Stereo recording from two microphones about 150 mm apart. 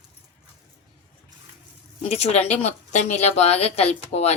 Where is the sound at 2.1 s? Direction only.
45° left (ahead or behind).